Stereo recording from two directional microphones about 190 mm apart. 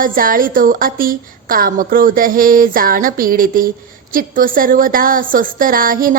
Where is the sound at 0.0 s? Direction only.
45° right (ahead or behind).